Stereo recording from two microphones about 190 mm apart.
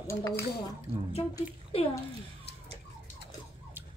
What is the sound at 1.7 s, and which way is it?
Speech, 30° left (ahead or behind).